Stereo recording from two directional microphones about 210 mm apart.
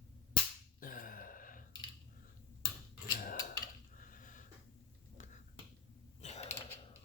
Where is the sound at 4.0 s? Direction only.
40° left (ahead or behind).